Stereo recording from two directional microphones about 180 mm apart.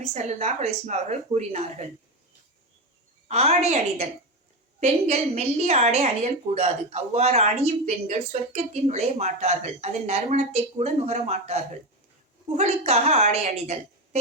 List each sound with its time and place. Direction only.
0.0 s a woman's voice: 40° right (ahead or behind)
3.2 s a woman's voice: 35° right (ahead or behind)